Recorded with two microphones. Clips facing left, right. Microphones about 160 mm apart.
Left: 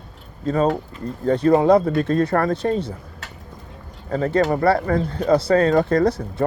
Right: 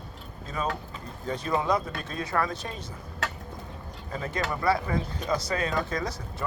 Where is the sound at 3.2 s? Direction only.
90° right.